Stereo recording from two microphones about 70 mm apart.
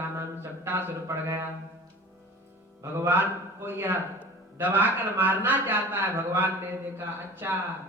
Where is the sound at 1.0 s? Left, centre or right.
Right.